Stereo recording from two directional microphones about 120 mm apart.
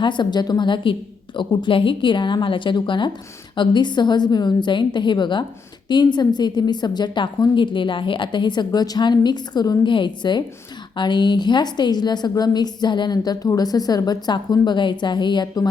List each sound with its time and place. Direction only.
0.0 s a woman's voice: 40° left (ahead or behind)